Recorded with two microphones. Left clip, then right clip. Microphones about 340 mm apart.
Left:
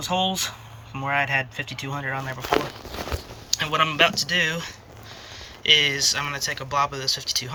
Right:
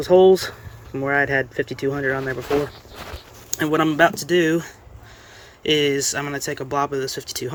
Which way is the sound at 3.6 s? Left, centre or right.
Centre.